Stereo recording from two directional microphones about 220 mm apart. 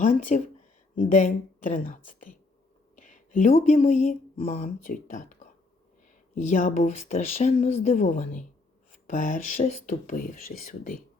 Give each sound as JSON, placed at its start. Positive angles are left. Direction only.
{"t": 0.0, "sound": "speech", "side_deg": 35}